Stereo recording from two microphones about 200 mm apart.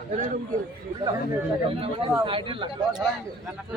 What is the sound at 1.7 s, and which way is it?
Speech, 30° right (ahead or behind).